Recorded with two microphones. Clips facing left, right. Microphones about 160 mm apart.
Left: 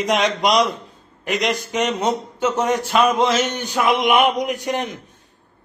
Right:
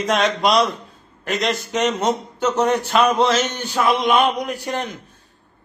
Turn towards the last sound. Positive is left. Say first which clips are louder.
# left 2 dB
turn(degrees=20)  # may be behind; listen again after turning